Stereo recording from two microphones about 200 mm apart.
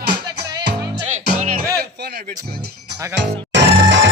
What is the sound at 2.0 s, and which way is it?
Music, 55° right (ahead or behind).